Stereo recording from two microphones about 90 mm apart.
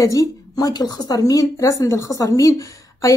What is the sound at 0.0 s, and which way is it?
A woman's voice, 40° left (ahead or behind).